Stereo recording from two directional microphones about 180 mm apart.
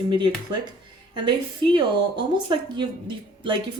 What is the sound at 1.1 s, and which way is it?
A woman's voice, 25° right (ahead or behind).